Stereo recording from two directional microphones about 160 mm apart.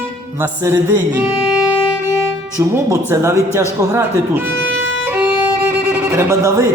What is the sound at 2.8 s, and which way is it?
Speech, 20° right (ahead or behind).